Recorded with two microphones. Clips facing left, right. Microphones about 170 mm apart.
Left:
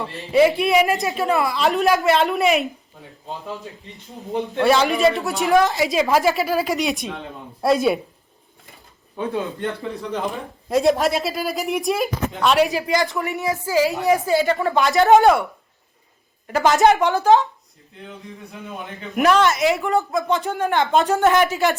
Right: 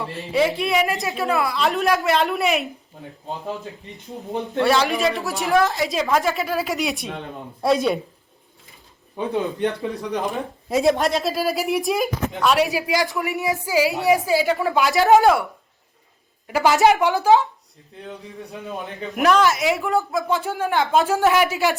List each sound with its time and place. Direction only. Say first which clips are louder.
0.3 s a woman's voice: left 4 dB; centre (ahead or behind)
4.4 s a woman's voice: left 2 dB; centre (ahead or behind)
9.1 s a man's voice: right 1 dB; 15° right (ahead or behind)
10.7 s a woman's voice: left 1 dB; centre (ahead or behind)
13.3 s a woman's voice: left 1 dB; 15° right (ahead or behind); by 15.4 s centre (ahead or behind)
16.5 s a woman's voice: left 1 dB; 5° right (ahead or behind)
19.1 s a woman's voice: left 1 dB; centre (ahead or behind)